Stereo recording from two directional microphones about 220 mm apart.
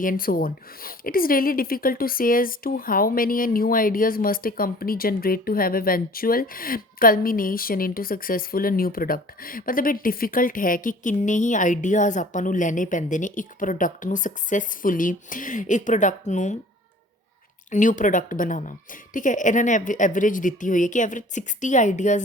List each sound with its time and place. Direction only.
0.0 s speech: 40° left (ahead or behind)
17.7 s speech: 35° left (ahead or behind)